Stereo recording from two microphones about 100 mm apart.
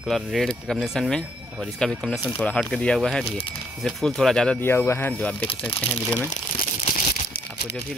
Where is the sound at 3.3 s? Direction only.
70° left (ahead or behind).